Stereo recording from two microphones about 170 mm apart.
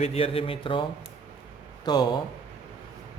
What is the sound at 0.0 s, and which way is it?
A man's voice, 35° left (ahead or behind).